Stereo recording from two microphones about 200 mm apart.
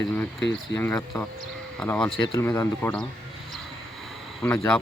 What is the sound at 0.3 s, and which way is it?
Speech, 60° left (ahead or behind).